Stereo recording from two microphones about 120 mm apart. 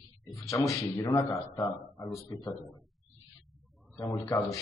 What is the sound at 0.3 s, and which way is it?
A man's voice, 25° left (ahead or behind).